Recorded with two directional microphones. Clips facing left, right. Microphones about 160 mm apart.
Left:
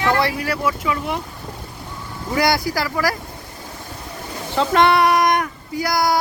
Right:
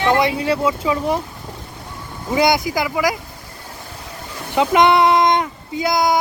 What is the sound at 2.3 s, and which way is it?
Speech, 20° right (ahead or behind).